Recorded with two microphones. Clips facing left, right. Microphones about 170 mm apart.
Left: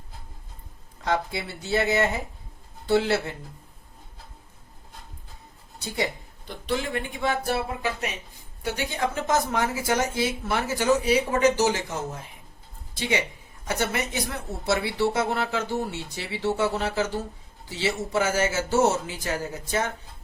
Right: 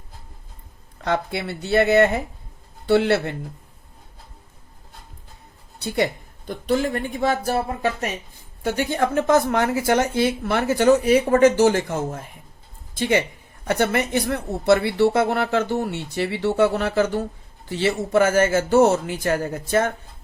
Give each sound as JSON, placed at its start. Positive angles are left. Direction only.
{"t": 1.0, "sound": "a woman's voice", "side_deg": -60}
{"t": 6.5, "sound": "a woman's voice", "side_deg": -45}